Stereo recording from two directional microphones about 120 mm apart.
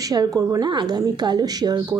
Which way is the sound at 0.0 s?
30° right (ahead or behind).